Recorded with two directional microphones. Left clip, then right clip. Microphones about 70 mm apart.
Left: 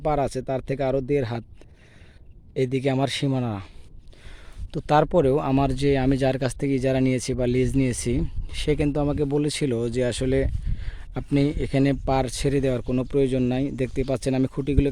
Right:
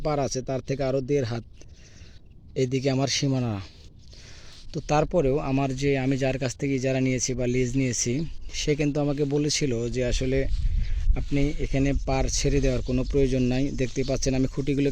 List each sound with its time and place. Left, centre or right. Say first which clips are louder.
0.0 s speech: left 3 dB; centre
2.6 s speech: left 2 dB; left
3.4 s speech: left 2 dB; centre
4.7 s speech: left 4 dB; left
5.2 s speech: left 4 dB; left
8.7 s speech: left 2 dB; left
9.0 s speech: left 2 dB; left
9.4 s speech: even; left
9.6 s speech: left 3 dB; left
11.1 s speech: left 4 dB; left
12.1 s speech: left 3 dB; left
12.5 s speech: left 5 dB; centre
14.4 s speech: left 1 dB; centre